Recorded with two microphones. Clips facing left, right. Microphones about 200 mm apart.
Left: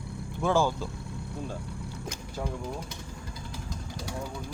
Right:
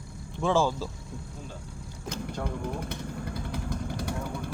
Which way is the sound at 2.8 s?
60° right (ahead or behind).